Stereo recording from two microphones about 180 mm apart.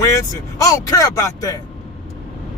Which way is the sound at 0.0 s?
15° left (ahead or behind).